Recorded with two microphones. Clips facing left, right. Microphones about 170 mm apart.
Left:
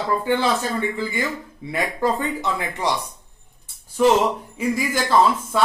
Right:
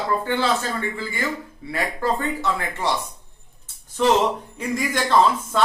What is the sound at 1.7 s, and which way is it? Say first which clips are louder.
Speech: left 2 dB; 15° left (ahead or behind).